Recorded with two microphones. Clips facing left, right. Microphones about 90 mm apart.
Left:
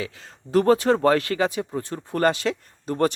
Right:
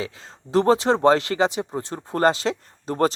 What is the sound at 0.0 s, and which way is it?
Speech, 25° right (ahead or behind).